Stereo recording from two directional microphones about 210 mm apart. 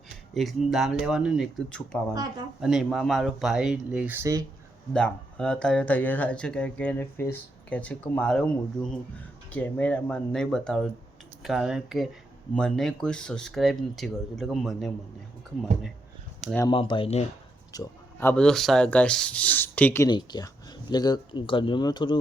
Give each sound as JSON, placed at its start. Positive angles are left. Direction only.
{"t": 0.3, "sound": "speech", "side_deg": 0}
{"t": 4.9, "sound": "speech", "side_deg": 5}
{"t": 16.6, "sound": "speech", "side_deg": 20}
{"t": 17.7, "sound": "speech", "side_deg": 15}